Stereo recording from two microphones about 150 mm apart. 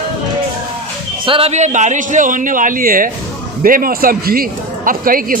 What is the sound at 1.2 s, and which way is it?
A man's voice, 40° right (ahead or behind).